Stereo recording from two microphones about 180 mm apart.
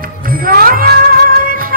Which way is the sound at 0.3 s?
55° right (ahead or behind).